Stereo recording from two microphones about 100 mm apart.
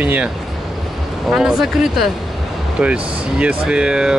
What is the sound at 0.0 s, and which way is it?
Speech, 15° right (ahead or behind).